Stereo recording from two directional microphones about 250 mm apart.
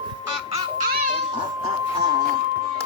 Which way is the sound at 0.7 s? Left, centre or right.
Right.